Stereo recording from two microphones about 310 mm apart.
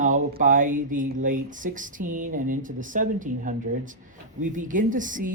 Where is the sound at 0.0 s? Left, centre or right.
Right.